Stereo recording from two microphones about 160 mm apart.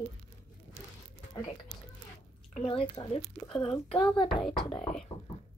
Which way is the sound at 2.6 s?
35° left (ahead or behind).